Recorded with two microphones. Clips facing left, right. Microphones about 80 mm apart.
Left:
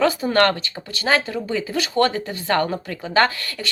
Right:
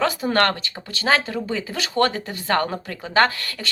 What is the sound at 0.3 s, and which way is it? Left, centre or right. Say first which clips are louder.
Speech: left 2 dB; right.